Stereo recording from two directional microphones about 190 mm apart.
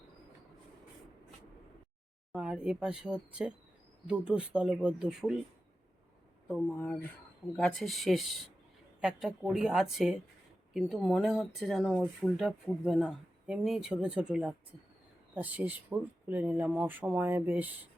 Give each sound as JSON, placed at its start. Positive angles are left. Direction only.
{"t": 2.3, "sound": "speech", "side_deg": -5}
{"t": 6.5, "sound": "speech", "side_deg": 10}
{"t": 7.4, "sound": "speech", "side_deg": 20}
{"t": 7.8, "sound": "speech", "side_deg": 0}